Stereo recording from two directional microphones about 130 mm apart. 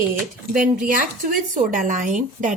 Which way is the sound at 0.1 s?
90° right.